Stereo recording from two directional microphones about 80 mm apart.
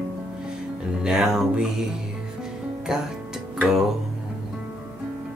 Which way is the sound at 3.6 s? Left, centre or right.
Centre.